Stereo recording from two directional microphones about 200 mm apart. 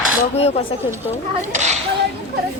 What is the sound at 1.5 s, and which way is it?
Speech, 35° right (ahead or behind).